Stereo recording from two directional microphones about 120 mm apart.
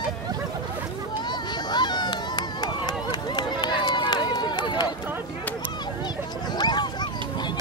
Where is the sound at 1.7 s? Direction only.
35° left (ahead or behind).